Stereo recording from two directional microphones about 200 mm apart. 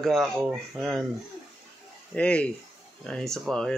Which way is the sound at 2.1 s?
5° left (ahead or behind).